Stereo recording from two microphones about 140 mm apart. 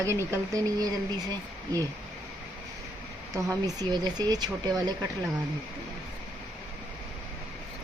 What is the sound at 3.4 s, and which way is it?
Speech, 25° right (ahead or behind).